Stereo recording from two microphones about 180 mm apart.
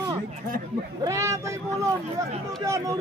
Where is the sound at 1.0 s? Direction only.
15° right (ahead or behind).